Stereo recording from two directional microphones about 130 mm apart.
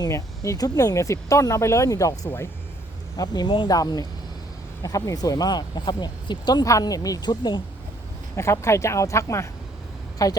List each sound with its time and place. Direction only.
0.0 s speech: 25° left (ahead or behind)
3.2 s speech: 35° left (ahead or behind)
8.4 s speech: 20° left (ahead or behind)